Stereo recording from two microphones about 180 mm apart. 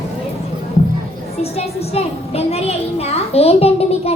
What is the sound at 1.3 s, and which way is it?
A child's voice, 35° left (ahead or behind).